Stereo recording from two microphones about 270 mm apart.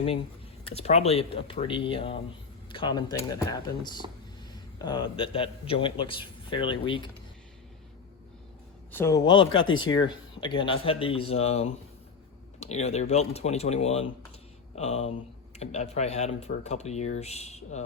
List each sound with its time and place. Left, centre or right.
0.7 s a man's voice: left
8.9 s speech: centre
9.6 s speech: left
9.8 s a man's voice: centre